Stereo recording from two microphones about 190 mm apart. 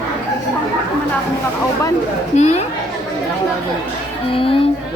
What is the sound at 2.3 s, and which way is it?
Speech, 35° left (ahead or behind).